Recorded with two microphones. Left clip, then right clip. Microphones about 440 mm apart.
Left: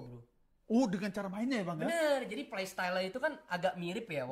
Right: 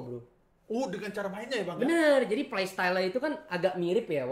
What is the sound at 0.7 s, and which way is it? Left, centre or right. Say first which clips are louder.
Speech: even; centre.